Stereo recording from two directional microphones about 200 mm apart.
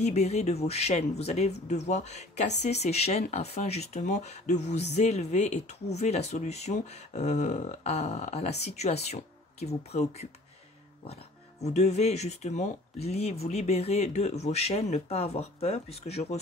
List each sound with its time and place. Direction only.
0.0 s speech: 35° left (ahead or behind)
11.6 s speech: 35° left (ahead or behind)